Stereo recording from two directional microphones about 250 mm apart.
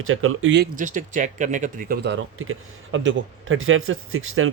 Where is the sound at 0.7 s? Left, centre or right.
Right.